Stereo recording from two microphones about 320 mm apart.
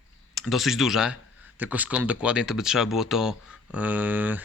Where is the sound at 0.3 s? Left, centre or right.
Centre.